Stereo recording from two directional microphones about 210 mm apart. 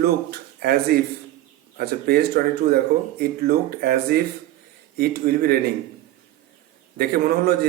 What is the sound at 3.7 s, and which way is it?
A man's voice, 45° right (ahead or behind).